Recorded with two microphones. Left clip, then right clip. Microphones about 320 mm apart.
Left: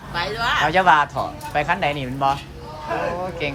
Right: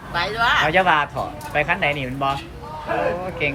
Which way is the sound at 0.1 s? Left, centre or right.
Centre.